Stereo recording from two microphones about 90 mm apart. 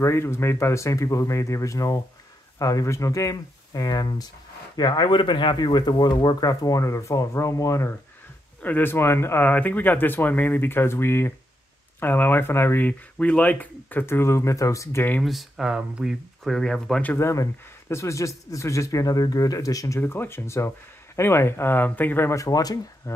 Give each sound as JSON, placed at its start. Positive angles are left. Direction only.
{"t": 0.0, "sound": "speech", "side_deg": 30}
{"t": 8.6, "sound": "speech", "side_deg": 25}
{"t": 15.2, "sound": "speech", "side_deg": 0}
{"t": 17.0, "sound": "speech", "side_deg": 20}
{"t": 17.3, "sound": "speech", "side_deg": 30}
{"t": 20.0, "sound": "speech", "side_deg": 25}